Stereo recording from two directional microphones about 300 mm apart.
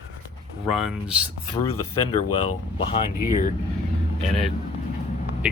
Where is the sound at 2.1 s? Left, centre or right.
Centre.